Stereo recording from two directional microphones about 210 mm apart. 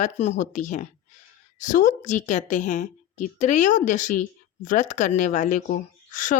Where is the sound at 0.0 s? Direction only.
35° left (ahead or behind).